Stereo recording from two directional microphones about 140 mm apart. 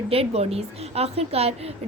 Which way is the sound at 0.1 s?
45° right (ahead or behind).